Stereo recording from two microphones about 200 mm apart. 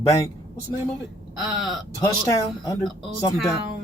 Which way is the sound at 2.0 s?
15° left (ahead or behind).